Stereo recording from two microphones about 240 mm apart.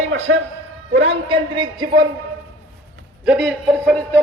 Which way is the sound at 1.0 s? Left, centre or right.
Right.